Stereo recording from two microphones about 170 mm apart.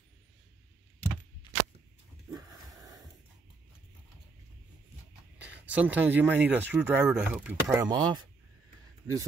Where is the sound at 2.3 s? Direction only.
20° right (ahead or behind).